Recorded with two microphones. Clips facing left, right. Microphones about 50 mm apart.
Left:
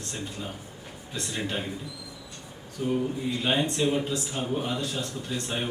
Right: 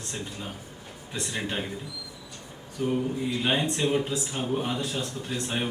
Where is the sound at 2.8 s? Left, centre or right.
Right.